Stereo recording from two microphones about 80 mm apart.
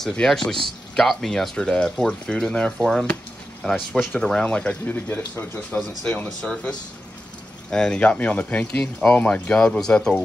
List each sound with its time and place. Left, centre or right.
0.0 s speech: centre
4.0 s speech: centre
4.6 s speech: left
5.8 s speech: centre